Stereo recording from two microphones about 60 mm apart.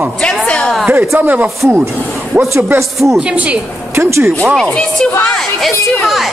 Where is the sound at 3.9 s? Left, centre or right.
Right.